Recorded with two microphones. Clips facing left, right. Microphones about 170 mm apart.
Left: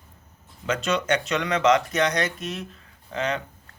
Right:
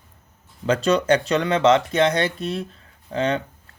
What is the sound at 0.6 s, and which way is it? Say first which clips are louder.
Speech: right 6 dB; 35° right (ahead or behind).